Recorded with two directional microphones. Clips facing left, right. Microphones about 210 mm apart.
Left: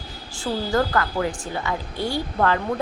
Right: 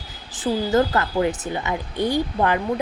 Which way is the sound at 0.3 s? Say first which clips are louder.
Right 3 dB; 20° right (ahead or behind).